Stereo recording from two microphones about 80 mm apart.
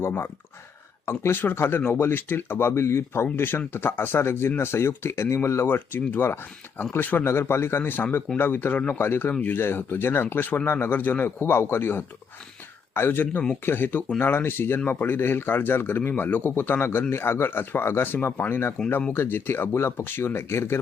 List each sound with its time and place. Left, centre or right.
0.0 s speech: left